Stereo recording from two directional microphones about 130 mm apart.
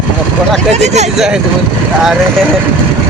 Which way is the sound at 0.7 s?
60° right (ahead or behind).